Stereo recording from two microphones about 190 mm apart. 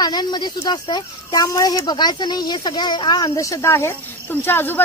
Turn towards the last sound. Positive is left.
turn(degrees=10)  # may be behind; listen again after turning